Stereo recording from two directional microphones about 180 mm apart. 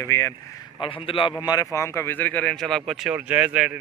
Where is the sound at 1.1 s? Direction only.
30° left (ahead or behind).